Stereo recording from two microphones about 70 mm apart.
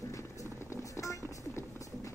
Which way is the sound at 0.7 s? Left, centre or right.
Left.